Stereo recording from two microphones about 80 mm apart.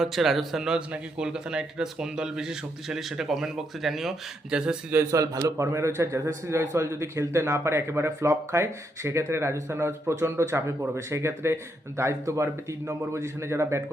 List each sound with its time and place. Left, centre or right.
0.0 s speech: centre
5.1 s a man's voice: right